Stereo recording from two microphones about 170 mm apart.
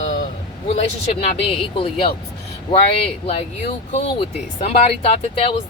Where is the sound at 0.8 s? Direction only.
40° left (ahead or behind).